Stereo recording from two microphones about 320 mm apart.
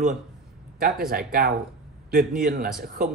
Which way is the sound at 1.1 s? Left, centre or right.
Right.